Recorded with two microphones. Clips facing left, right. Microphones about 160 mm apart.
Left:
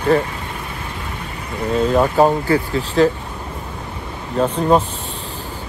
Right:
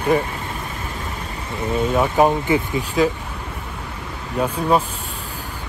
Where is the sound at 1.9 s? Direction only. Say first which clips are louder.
Left 2 dB; 5° right (ahead or behind).